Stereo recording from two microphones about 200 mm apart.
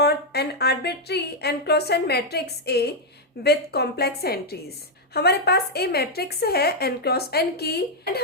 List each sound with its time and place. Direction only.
0.0 s a woman's voice: 55° left (ahead or behind)